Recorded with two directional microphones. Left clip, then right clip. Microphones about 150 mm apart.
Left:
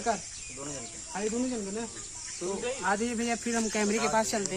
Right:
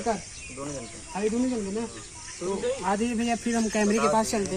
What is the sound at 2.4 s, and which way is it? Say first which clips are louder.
Speech: right 4 dB; 5° left (ahead or behind).